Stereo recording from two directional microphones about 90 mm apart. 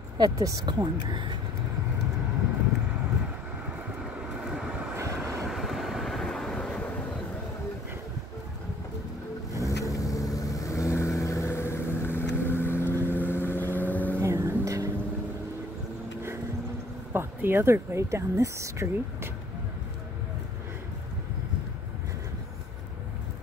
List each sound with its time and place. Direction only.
0.2 s speech: 45° right (ahead or behind)
4.0 s vehicle: 5° right (ahead or behind)
4.9 s vehicle: 30° right (ahead or behind)
5.5 s train: centre (ahead or behind)
9.6 s vehicle: 35° left (ahead or behind); by 14.2 s 20° left (ahead or behind)
14.2 s vehicle: 30° right (ahead or behind)
17.1 s speech: 25° right (ahead or behind)